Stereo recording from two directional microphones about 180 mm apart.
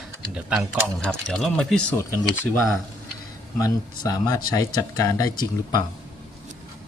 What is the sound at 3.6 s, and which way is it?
Speech, 20° left (ahead or behind).